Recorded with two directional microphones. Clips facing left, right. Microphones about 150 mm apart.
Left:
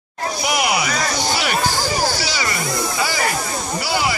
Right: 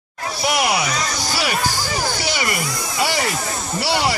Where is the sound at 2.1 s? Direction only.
55° right (ahead or behind).